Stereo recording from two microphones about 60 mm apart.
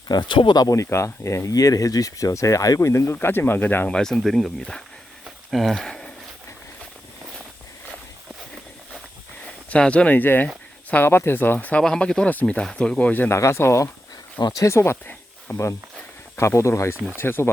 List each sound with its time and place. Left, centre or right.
0.5 s speech: left
0.9 s speech: left
2.8 s speech: left
3.2 s speech: left
3.8 s speech: centre
9.6 s speech: centre
11.3 s speech: left
11.8 s speech: centre
13.3 s speech: left
17.2 s speech: left